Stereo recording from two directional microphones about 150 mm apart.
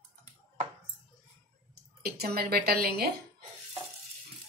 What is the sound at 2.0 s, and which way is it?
A woman's voice, 90° right.